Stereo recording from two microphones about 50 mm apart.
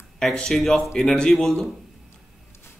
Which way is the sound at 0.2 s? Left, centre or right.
Centre.